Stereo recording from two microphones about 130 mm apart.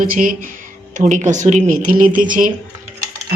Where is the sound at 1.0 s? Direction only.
75° right (ahead or behind).